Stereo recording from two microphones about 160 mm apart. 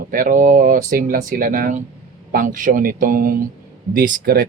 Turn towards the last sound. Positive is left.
turn(degrees=-70)  # may be behind; listen again after turning